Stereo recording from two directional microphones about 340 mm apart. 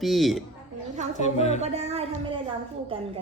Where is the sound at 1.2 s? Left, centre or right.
Centre.